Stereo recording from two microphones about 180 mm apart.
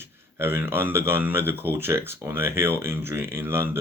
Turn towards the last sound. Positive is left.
turn(degrees=-15)  # may be behind; listen again after turning